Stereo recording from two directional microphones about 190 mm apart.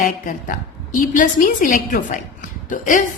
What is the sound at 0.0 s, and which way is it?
A woman's voice, 45° left (ahead or behind).